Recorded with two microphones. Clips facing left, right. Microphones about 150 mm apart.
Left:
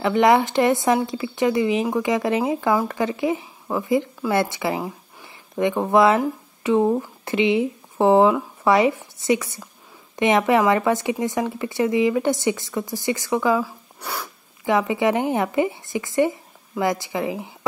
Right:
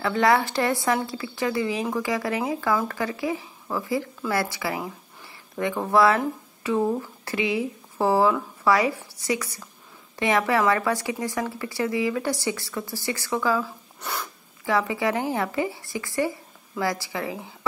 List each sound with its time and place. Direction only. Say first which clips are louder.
0.0 s speech: left 4 dB; 20° left (ahead or behind)
14.0 s speech: left 1 dB; 5° left (ahead or behind)
14.6 s speech: left 4 dB; 20° left (ahead or behind)